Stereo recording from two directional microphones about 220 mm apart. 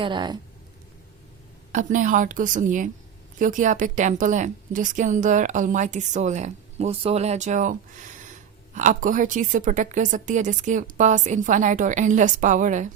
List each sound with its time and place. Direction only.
0.0 s speech: 20° right (ahead or behind)
1.7 s a woman's voice: 35° right (ahead or behind)